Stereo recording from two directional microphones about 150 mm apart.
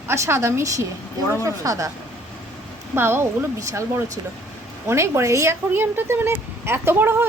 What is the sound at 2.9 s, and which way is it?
A woman's voice, 15° right (ahead or behind).